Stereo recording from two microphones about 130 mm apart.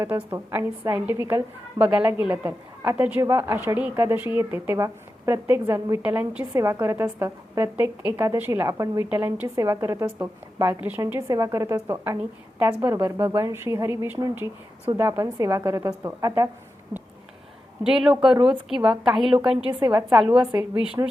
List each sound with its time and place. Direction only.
0.0 s a woman's voice: 20° right (ahead or behind)
6.0 s a woman's voice: 10° right (ahead or behind)
6.4 s a woman's voice: 25° right (ahead or behind)
11.0 s a woman's voice: 25° right (ahead or behind)
17.8 s a woman's voice: 5° right (ahead or behind)
19.8 s a woman's voice: 25° right (ahead or behind)